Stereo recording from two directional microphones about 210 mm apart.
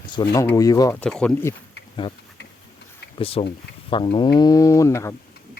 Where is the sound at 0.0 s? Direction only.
20° left (ahead or behind).